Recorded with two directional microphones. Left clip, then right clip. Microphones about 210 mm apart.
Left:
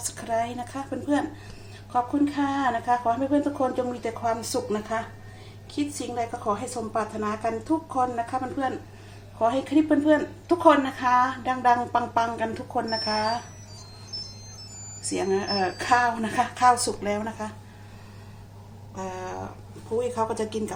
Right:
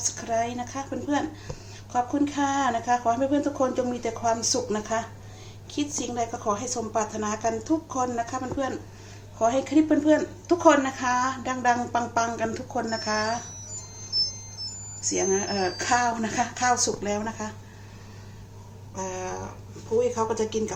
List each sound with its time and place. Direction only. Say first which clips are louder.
0.1 s a woman's voice: left 4 dB; 15° left (ahead or behind)
15.1 s a woman's voice: even; 10° left (ahead or behind)
18.9 s a woman's voice: right 1 dB; 15° left (ahead or behind)